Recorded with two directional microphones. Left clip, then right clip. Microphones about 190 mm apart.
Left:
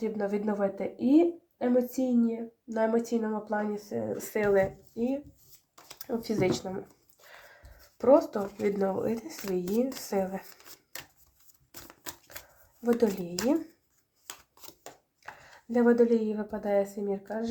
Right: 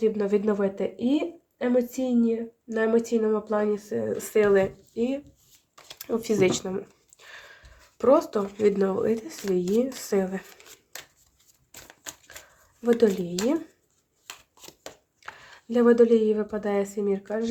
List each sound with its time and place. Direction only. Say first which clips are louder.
0.0 s speech: right 7 dB; 30° right (ahead or behind)
12.8 s speech: right 5 dB; 25° right (ahead or behind)
15.7 s speech: right 5 dB; 25° right (ahead or behind)